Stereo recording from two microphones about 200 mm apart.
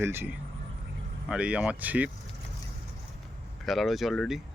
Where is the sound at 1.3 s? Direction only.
5° right (ahead or behind).